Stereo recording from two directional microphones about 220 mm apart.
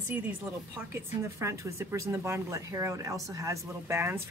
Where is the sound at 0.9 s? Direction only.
15° right (ahead or behind).